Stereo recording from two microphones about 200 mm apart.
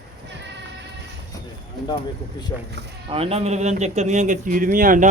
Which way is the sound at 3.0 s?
30° right (ahead or behind).